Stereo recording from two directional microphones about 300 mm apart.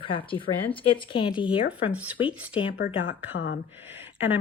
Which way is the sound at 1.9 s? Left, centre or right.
Centre.